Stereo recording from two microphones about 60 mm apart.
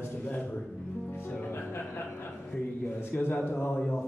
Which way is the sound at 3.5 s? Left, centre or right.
Left.